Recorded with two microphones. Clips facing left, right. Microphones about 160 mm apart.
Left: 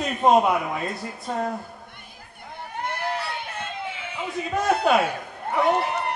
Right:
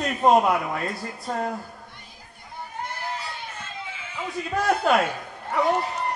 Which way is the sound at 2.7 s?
65° left (ahead or behind).